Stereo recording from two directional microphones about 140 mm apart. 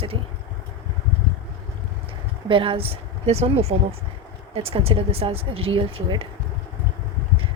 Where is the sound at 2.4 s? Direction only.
40° right (ahead or behind).